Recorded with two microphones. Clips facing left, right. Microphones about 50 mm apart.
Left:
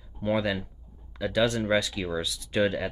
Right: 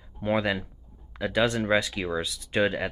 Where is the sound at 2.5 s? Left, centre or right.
Right.